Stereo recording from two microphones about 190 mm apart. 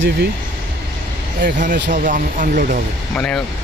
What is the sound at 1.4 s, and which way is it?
Speech, 45° right (ahead or behind).